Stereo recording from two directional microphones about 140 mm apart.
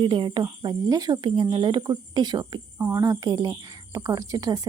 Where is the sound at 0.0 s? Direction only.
35° right (ahead or behind).